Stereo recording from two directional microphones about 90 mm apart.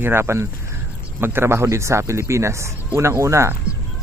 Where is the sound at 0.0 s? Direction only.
25° right (ahead or behind).